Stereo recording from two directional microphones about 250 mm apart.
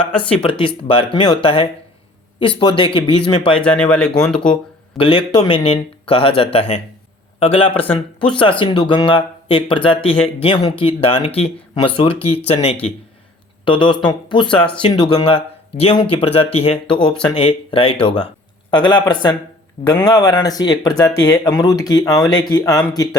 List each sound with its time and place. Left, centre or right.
0.6 s speech: left
3.6 s speech: centre
4.9 s speech: left
7.8 s speech: centre
8.4 s speech: left
13.7 s speech: centre
14.4 s speech: centre
14.8 s speech: centre
16.8 s speech: centre
17.2 s a man's voice: centre